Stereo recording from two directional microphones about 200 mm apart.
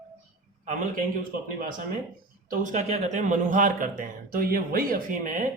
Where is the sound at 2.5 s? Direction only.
40° right (ahead or behind).